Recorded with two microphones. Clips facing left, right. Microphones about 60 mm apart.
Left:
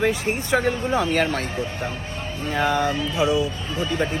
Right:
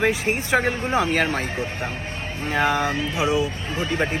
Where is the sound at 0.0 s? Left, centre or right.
Right.